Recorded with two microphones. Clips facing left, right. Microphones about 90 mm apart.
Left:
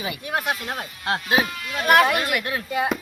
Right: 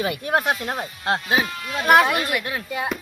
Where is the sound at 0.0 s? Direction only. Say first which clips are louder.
Right 6 dB; 55° right (ahead or behind).